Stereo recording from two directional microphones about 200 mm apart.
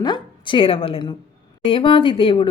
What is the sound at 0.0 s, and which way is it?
A woman's voice, 25° left (ahead or behind).